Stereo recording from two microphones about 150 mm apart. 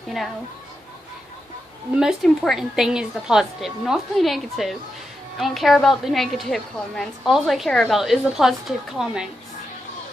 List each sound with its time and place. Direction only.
2.0 s a woman's voice: centre (ahead or behind)